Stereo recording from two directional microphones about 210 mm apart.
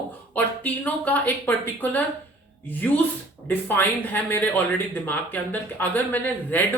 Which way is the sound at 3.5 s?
10° left (ahead or behind).